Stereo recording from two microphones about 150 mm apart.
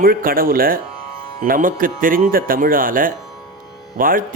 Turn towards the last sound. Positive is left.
turn(degrees=-70)  # may be behind; listen again after turning